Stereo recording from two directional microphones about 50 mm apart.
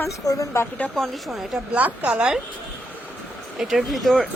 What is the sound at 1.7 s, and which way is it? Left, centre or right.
Speech, right.